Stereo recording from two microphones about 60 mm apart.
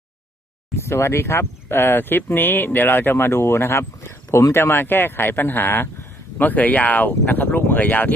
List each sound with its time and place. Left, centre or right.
0.8 s speech: left